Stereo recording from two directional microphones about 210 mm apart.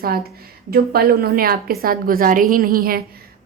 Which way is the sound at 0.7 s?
45° right (ahead or behind).